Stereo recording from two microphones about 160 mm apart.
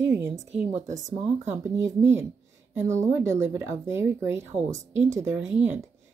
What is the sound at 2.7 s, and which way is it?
Speech, 15° right (ahead or behind).